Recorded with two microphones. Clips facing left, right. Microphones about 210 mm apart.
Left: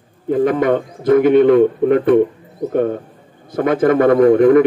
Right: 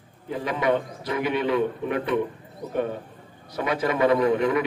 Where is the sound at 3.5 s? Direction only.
50° left (ahead or behind).